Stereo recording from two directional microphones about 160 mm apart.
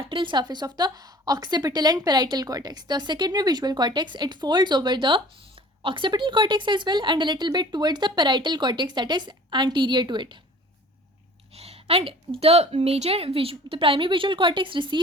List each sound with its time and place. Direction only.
0.0 s a woman's voice: 30° right (ahead or behind)
11.5 s a woman's voice: 40° right (ahead or behind)